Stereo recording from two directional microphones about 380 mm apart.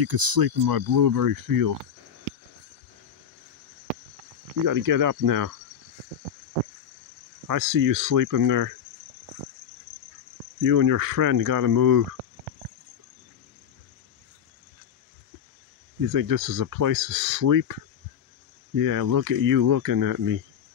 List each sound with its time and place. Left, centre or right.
0.0 s speech: right
4.6 s speech: right
7.4 s speech: right
10.6 s speech: right
16.1 s speech: right
18.8 s speech: right